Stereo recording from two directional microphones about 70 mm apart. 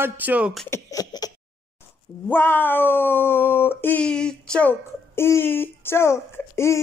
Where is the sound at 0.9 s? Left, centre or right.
Left.